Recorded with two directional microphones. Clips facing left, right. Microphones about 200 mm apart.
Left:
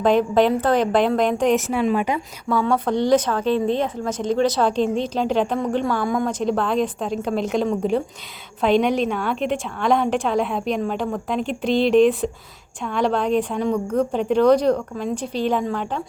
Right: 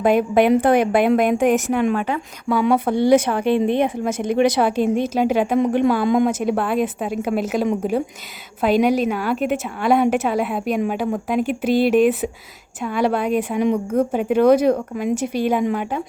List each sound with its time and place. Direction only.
0.0 s a woman's voice: 10° right (ahead or behind)
2.0 s a woman's voice: 10° left (ahead or behind)
2.6 s a woman's voice: 10° right (ahead or behind)